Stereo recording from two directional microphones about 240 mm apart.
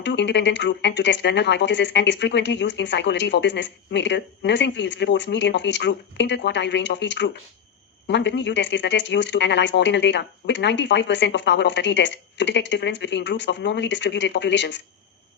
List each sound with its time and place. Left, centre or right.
0.0 s speech: left